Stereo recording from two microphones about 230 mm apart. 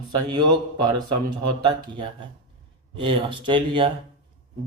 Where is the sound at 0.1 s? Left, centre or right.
Centre.